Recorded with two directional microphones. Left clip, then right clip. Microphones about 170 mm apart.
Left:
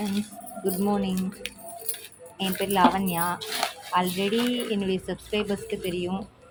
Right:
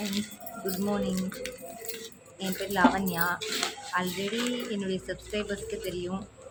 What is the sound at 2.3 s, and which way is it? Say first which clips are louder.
Speech: left 5 dB; 20° left (ahead or behind).